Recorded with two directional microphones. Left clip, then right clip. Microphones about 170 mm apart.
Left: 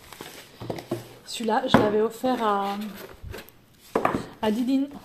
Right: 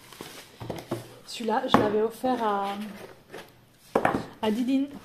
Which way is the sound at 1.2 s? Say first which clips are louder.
Left 3 dB; 15° left (ahead or behind).